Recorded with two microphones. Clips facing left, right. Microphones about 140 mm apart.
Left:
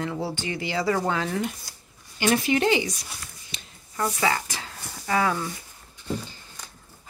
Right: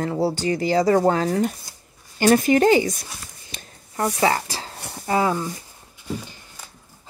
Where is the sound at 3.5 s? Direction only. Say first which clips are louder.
Right 3 dB; 50° right (ahead or behind).